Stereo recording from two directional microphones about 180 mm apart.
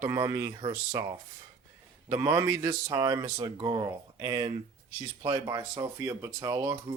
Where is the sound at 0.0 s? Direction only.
15° right (ahead or behind).